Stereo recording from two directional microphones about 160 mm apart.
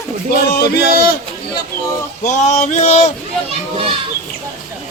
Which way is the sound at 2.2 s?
50° left (ahead or behind).